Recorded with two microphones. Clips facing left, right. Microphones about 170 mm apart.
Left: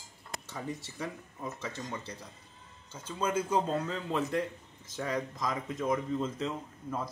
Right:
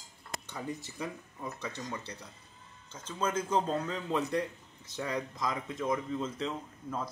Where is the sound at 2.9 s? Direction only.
10° left (ahead or behind).